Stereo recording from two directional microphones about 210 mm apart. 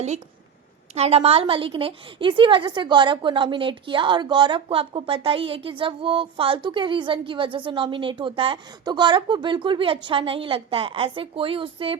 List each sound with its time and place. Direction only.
0.9 s a woman's voice: 30° right (ahead or behind)